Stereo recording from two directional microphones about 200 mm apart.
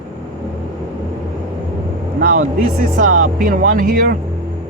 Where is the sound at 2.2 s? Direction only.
45° right (ahead or behind).